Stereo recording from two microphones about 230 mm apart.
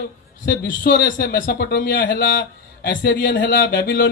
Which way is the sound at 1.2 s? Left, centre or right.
Left.